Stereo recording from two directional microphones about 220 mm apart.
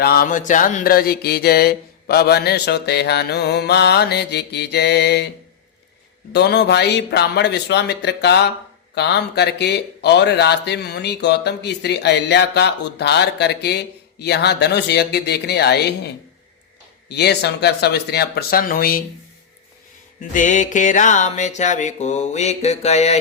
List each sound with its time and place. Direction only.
0.0 s mantra: 45° left (ahead or behind)
6.3 s mantra: 50° left (ahead or behind)
20.3 s music: 35° left (ahead or behind)